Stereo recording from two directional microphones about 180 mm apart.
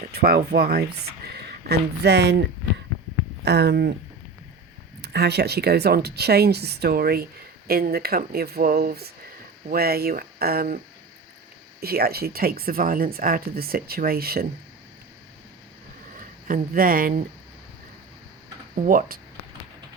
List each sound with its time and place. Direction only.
0.1 s speech: 60° right (ahead or behind)
3.4 s speech: 65° right (ahead or behind)
5.0 s speech: 65° right (ahead or behind)
11.8 s speech: 60° right (ahead or behind)
16.1 s speech: 50° right (ahead or behind)
18.8 s speech: 50° right (ahead or behind)